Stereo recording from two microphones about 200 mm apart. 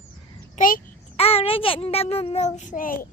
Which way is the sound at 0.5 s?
40° left (ahead or behind).